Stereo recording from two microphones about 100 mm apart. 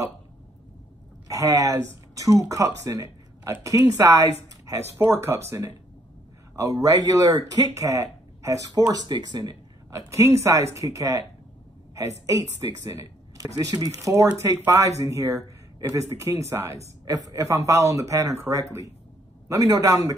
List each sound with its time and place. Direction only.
1.2 s a man's voice: 35° right (ahead or behind)